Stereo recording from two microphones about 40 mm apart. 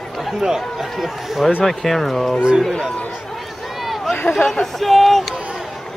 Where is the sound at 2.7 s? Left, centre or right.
Centre.